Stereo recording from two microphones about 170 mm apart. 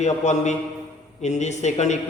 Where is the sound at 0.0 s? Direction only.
45° left (ahead or behind).